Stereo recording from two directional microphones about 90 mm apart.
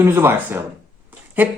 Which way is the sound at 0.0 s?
25° right (ahead or behind).